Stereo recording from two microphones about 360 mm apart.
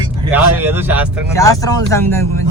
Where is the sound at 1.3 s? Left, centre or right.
Centre.